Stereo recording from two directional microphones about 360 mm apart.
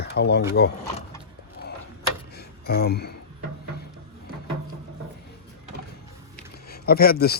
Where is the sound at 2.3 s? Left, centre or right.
Left.